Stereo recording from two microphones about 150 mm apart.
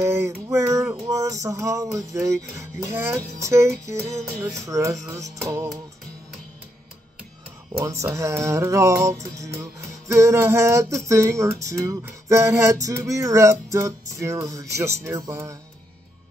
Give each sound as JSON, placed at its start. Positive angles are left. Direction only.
{"t": 0.0, "sound": "a sound", "side_deg": -20}
{"t": 0.5, "sound": "music", "side_deg": -20}
{"t": 7.8, "sound": "music", "side_deg": -20}